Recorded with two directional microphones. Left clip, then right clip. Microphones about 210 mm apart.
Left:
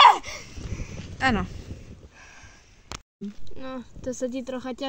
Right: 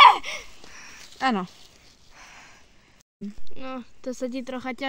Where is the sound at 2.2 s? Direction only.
5° right (ahead or behind).